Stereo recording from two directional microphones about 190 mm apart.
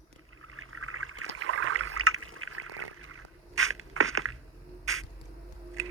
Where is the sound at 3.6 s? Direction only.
90° right.